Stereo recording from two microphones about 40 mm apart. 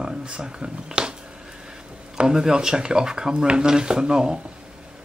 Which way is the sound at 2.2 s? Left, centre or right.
Centre.